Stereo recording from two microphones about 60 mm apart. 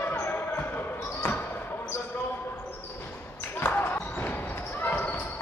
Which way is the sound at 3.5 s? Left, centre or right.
Left.